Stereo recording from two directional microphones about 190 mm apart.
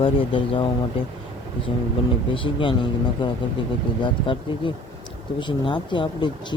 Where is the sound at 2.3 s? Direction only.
25° left (ahead or behind).